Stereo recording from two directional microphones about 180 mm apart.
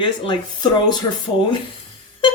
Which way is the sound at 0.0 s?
25° left (ahead or behind).